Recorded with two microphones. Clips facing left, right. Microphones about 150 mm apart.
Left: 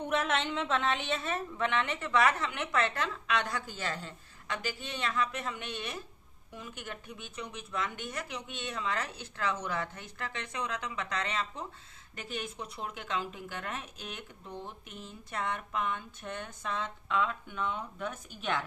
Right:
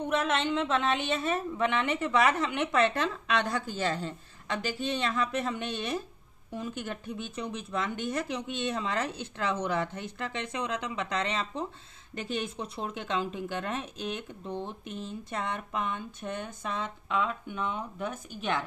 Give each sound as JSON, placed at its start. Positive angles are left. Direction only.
{"t": 0.3, "sound": "speech", "side_deg": 0}